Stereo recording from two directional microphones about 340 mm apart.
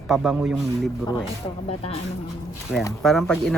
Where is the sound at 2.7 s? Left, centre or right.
Centre.